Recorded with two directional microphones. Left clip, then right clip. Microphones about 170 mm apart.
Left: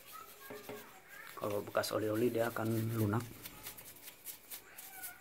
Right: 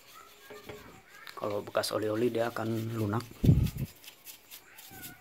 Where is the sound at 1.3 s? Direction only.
15° right (ahead or behind).